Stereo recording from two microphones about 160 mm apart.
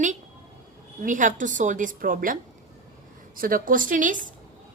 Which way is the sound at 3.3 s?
60° right (ahead or behind).